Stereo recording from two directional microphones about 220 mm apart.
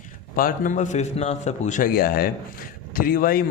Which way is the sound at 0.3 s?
40° left (ahead or behind).